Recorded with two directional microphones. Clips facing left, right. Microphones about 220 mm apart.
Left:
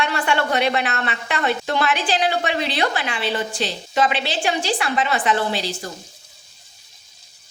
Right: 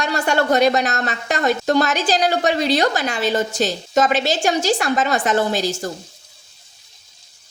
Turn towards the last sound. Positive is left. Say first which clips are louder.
# right 4 dB
turn(degrees=-45)  # may be behind; listen again after turning